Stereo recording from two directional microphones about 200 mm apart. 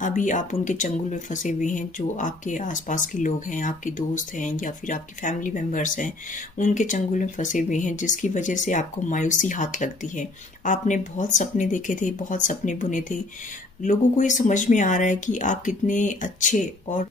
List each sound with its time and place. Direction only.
0.0 s speech: 40° left (ahead or behind)